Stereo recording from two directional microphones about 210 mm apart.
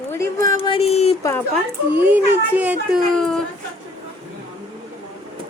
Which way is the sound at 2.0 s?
10° right (ahead or behind).